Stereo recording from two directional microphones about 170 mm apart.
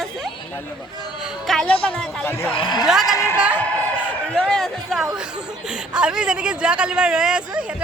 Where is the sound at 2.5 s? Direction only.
25° left (ahead or behind).